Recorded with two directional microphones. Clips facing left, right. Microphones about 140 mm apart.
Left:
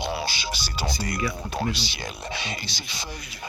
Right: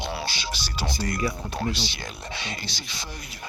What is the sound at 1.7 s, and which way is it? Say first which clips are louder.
Speech: even; 25° right (ahead or behind).